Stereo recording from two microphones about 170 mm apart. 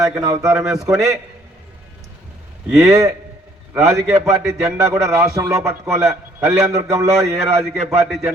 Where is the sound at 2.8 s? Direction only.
20° right (ahead or behind).